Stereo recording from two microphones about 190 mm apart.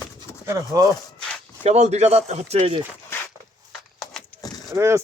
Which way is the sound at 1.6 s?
35° right (ahead or behind).